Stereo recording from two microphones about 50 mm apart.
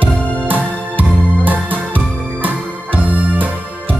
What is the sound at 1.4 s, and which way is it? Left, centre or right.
Music, right.